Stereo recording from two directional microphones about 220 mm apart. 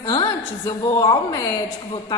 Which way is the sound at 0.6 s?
15° left (ahead or behind).